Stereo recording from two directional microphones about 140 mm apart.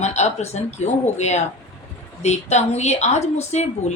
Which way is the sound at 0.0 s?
55° left (ahead or behind).